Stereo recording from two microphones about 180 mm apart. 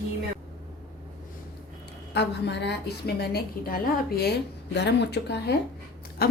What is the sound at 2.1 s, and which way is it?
A woman's voice, 70° left (ahead or behind).